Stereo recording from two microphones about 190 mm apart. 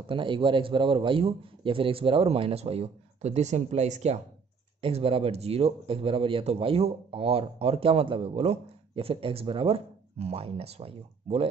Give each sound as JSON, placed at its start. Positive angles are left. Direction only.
{"t": 0.0, "sound": "a man's voice", "side_deg": -25}